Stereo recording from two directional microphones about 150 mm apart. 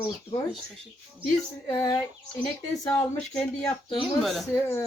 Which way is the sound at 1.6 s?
20° left (ahead or behind).